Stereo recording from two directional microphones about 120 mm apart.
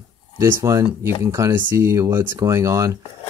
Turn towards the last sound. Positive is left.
turn(degrees=-25)  # may be behind; listen again after turning